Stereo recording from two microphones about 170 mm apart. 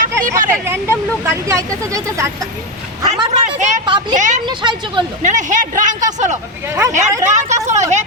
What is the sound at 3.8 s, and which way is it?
Speech, 25° right (ahead or behind).